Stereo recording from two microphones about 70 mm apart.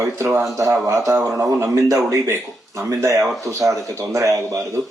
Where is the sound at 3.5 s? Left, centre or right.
Right.